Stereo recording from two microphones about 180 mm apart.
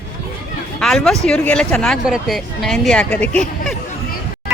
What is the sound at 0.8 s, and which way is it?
A woman's voice, 5° left (ahead or behind).